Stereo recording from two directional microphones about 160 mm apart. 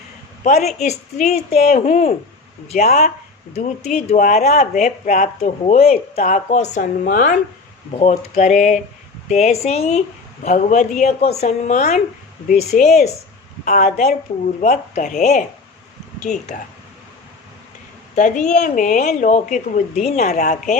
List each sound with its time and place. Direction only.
0.4 s a woman's voice: 55° left (ahead or behind)
7.0 s speech: 60° left (ahead or behind)
7.9 s a woman's voice: 45° left (ahead or behind)
18.1 s a woman's voice: 50° left (ahead or behind)